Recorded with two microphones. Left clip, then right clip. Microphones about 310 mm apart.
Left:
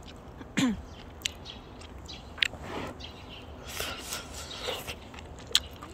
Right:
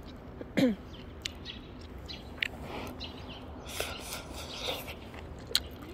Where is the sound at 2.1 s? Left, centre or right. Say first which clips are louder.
Left 6 dB; centre.